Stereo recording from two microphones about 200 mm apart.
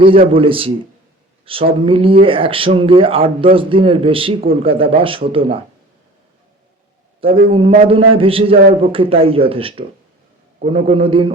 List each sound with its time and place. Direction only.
0.0 s speech: 25° right (ahead or behind)
7.5 s speech: 30° right (ahead or behind)